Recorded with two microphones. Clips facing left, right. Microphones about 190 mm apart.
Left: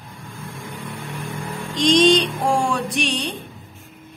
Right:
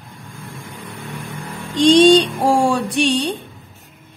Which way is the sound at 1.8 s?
30° right (ahead or behind).